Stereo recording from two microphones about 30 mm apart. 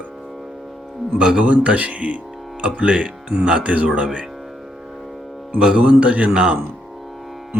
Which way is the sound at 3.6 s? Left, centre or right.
Right.